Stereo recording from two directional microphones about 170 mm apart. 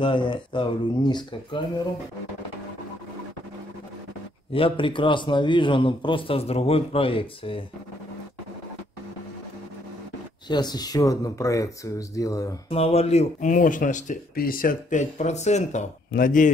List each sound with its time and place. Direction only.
0.0 s speech: 30° left (ahead or behind)
4.5 s a man's voice: 30° left (ahead or behind)
10.5 s speech: 25° left (ahead or behind)
12.6 s speech: 35° left (ahead or behind)
16.1 s speech: 55° left (ahead or behind)